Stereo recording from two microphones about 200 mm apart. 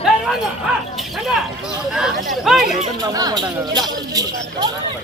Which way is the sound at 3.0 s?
20° right (ahead or behind).